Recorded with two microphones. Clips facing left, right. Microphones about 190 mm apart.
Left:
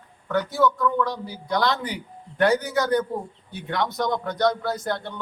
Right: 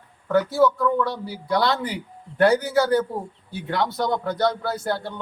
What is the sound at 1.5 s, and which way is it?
Speech, 30° right (ahead or behind).